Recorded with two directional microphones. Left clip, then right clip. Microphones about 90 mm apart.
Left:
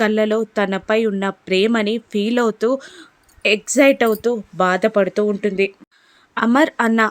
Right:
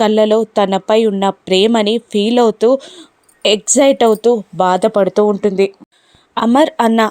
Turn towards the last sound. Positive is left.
turn(degrees=-40)  # may be behind; listen again after turning